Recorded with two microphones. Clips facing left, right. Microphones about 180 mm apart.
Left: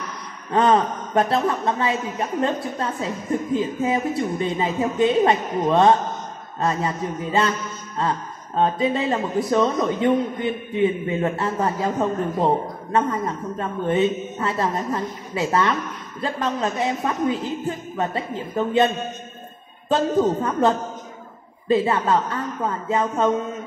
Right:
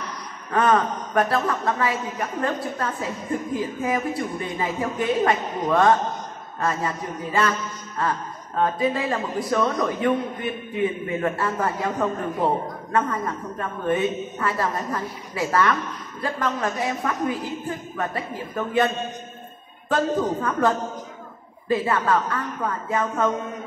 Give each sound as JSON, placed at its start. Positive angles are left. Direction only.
{"t": 0.5, "sound": "a man's voice", "side_deg": 25}
{"t": 19.9, "sound": "a man's voice", "side_deg": 25}